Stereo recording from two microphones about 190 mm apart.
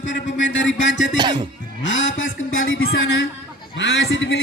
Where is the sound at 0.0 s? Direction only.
75° left (ahead or behind).